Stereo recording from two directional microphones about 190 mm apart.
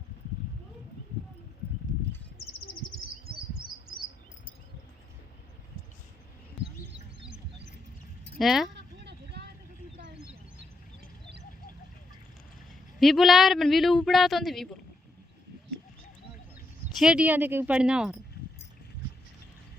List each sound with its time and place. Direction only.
2.6 s bird: 45° left (ahead or behind)
8.4 s speech: centre (ahead or behind)
9.0 s vehicle: 60° right (ahead or behind)
13.0 s speech: centre (ahead or behind)
17.0 s speech: 5° right (ahead or behind)